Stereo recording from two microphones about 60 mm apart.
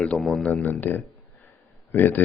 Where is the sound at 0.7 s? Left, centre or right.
Left.